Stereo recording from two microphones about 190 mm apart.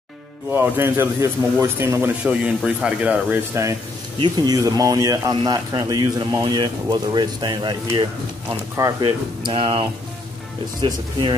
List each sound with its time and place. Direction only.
0.5 s a man's voice: 10° right (ahead or behind); by 9.8 s 30° right (ahead or behind)